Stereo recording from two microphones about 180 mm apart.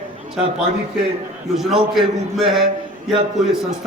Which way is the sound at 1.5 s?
Centre (ahead or behind).